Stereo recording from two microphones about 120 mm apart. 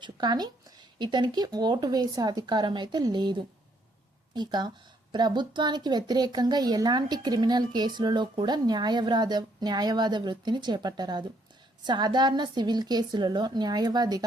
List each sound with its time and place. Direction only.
0.0 s a woman's voice: 35° right (ahead or behind)